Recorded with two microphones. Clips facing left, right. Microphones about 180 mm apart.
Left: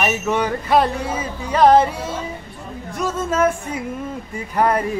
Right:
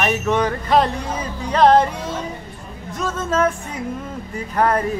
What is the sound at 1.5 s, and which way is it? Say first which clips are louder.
Speech: left 1 dB; 5° left (ahead or behind).